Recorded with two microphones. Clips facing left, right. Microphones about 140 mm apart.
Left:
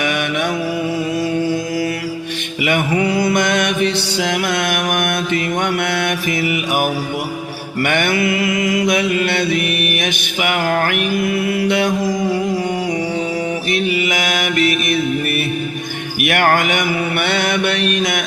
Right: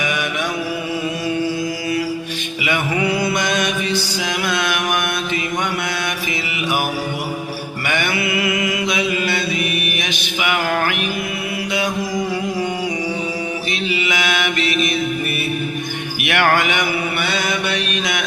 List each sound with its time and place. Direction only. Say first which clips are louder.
0.0 s mantra: left 3 dB; 60° left (ahead or behind)
2.9 s mantra: left 2 dB; 40° left (ahead or behind)
9.0 s mantra: left 3 dB; 60° left (ahead or behind); by 10.9 s 40° left (ahead or behind)
13.7 s mantra: left 3 dB; 55° left (ahead or behind)
16.2 s mantra: left 2 dB; 45° left (ahead or behind)